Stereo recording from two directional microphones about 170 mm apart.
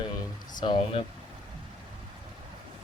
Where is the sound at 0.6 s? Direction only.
25° left (ahead or behind).